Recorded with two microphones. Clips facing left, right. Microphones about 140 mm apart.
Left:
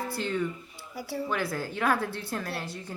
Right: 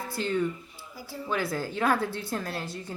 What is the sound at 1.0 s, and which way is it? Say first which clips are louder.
Speech: left 6 dB; 70° left (ahead or behind).